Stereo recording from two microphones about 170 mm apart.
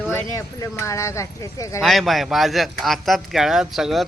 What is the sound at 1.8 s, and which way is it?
Speech, centre (ahead or behind).